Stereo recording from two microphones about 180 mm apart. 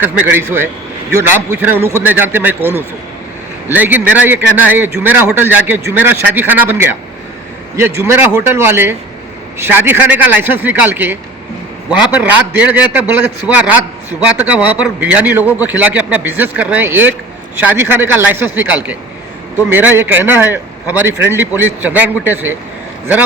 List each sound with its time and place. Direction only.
0.0 s a man's voice: 10° right (ahead or behind)
14.3 s a man's voice: 10° right (ahead or behind)